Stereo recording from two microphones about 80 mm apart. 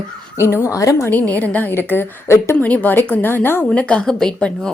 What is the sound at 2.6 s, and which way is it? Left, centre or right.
A woman's voice, left.